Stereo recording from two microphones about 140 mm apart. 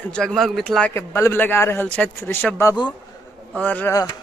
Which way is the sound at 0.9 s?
20° left (ahead or behind).